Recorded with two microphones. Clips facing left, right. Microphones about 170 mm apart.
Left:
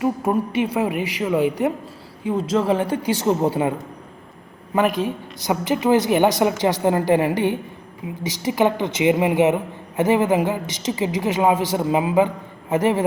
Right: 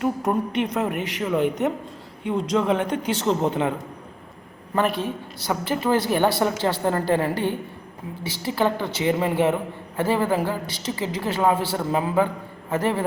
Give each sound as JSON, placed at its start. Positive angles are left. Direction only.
{"t": 0.0, "sound": "a woman's voice", "side_deg": 5}